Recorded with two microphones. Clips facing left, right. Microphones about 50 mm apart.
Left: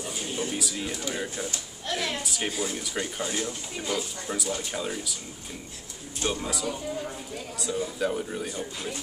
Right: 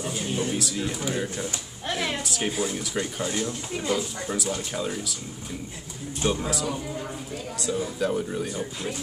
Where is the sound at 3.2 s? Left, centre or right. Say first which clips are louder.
Right 3 dB; centre.